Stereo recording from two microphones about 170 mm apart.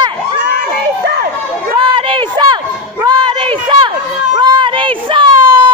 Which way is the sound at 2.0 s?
30° right (ahead or behind).